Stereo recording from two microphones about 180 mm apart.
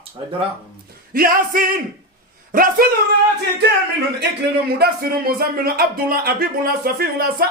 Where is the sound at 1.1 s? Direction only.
55° right (ahead or behind).